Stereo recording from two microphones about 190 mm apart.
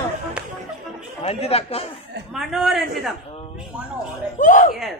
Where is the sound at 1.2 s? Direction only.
30° left (ahead or behind).